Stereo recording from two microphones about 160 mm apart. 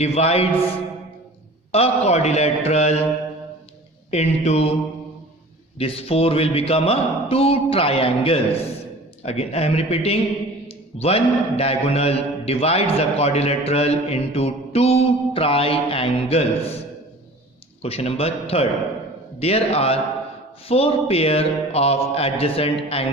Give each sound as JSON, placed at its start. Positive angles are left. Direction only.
{"t": 0.0, "sound": "mantra", "side_deg": 40}
{"t": 1.7, "sound": "a man's voice", "side_deg": 40}
{"t": 4.1, "sound": "a man's voice", "side_deg": 45}
{"t": 5.8, "sound": "mantra", "side_deg": 35}
{"t": 17.8, "sound": "mantra", "side_deg": 40}